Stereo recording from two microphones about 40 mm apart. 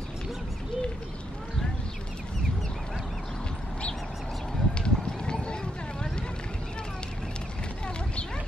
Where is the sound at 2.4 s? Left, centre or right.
Centre.